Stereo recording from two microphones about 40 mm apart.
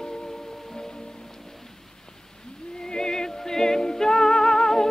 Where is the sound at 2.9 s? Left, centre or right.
Centre.